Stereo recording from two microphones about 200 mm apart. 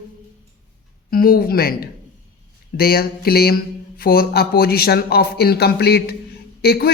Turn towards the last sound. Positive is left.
turn(degrees=50)  # may be behind; listen again after turning